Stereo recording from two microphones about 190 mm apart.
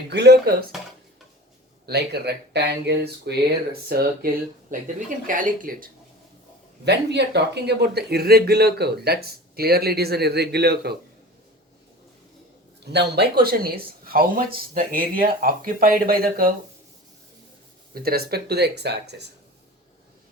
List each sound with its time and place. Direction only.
0.1 s speech: 60° right (ahead or behind)
0.7 s dishes: 5° right (ahead or behind)
1.9 s speech: 60° right (ahead or behind)
6.8 s speech: 65° right (ahead or behind)
12.8 s speech: 60° right (ahead or behind)
17.9 s speech: 55° right (ahead or behind)